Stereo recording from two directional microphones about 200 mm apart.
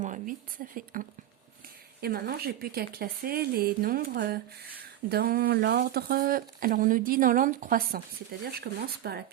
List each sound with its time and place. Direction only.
0.0 s speech: 40° right (ahead or behind)